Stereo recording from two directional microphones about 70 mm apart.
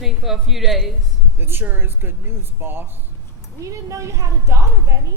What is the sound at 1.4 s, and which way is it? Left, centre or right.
Speech, right.